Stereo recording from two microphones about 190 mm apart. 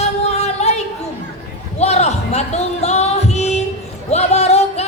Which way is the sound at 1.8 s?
35° left (ahead or behind).